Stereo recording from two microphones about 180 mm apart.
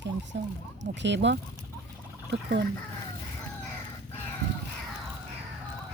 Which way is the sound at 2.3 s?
65° right (ahead or behind).